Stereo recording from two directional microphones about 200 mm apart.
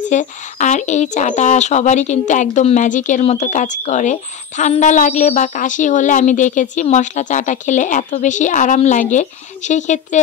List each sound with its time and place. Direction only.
0.1 s speech: 35° left (ahead or behind)